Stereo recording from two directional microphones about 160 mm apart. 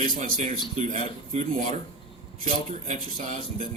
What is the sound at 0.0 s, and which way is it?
Speech, 55° right (ahead or behind).